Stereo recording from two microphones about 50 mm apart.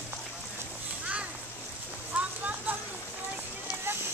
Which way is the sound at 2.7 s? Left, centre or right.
Right.